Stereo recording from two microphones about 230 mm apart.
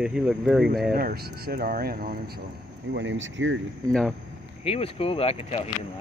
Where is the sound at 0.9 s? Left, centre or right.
Right.